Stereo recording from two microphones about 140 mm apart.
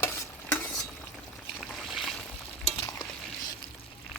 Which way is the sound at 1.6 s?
Centre (ahead or behind).